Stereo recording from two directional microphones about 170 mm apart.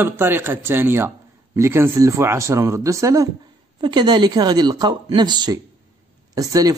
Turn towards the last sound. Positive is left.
turn(degrees=-20)  # may be behind; listen again after turning